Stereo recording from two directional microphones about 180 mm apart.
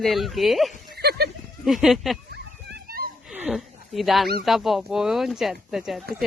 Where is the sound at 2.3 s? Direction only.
60° right (ahead or behind).